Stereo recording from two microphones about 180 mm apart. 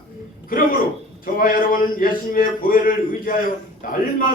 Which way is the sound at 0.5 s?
55° left (ahead or behind).